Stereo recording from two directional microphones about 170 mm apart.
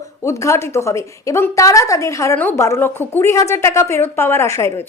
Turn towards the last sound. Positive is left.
turn(degrees=15)  # may be behind; listen again after turning